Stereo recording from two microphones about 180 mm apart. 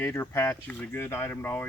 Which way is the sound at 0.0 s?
15° left (ahead or behind).